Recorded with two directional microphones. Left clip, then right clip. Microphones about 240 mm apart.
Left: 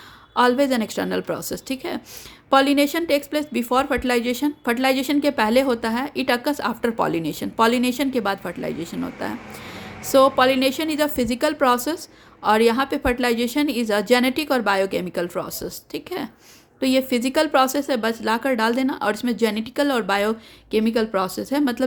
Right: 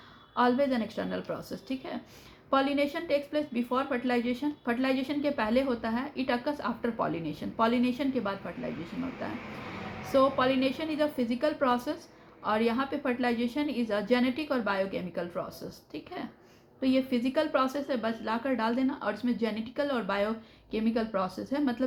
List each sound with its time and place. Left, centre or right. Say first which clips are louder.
0.3 s a woman's voice: left 8 dB; left